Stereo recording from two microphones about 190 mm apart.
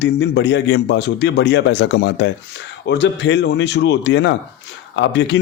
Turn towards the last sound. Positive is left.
turn(degrees=70)  # may be behind; listen again after turning